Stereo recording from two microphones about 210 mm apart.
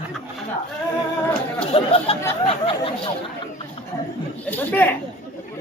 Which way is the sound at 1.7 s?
25° left (ahead or behind).